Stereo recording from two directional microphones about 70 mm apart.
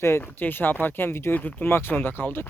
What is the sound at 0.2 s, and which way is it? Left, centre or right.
Speech, left.